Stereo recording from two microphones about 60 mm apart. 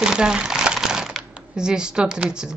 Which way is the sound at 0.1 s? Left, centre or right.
Centre.